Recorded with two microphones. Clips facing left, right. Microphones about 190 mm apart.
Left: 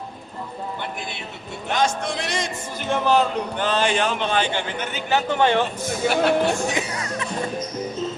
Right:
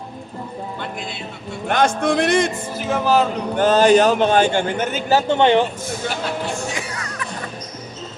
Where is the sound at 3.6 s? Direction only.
40° right (ahead or behind).